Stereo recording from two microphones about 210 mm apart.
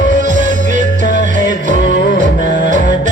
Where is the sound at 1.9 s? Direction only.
55° left (ahead or behind).